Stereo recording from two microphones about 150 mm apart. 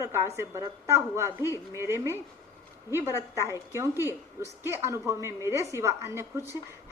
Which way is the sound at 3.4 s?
20° right (ahead or behind).